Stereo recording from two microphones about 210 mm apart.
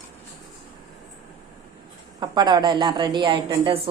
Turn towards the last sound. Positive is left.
turn(degrees=-25)  # may be behind; listen again after turning